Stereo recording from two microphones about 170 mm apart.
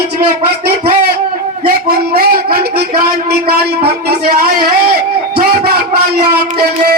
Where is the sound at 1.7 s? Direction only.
65° right (ahead or behind).